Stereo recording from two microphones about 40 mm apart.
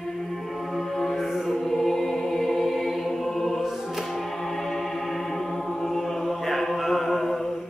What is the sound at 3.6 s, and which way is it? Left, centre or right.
Music, centre.